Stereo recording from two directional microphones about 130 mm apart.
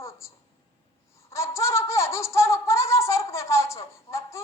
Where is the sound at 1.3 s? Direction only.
25° left (ahead or behind).